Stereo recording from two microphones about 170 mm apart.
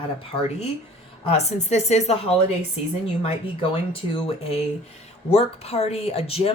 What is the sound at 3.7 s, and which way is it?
Speech, 35° left (ahead or behind).